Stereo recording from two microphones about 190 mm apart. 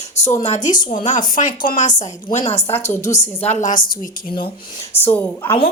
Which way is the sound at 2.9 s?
40° left (ahead or behind).